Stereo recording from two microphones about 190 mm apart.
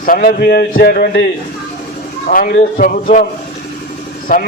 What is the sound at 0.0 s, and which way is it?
A man's voice, 50° left (ahead or behind).